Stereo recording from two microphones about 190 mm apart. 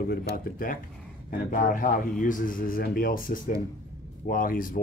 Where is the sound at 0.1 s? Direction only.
50° left (ahead or behind).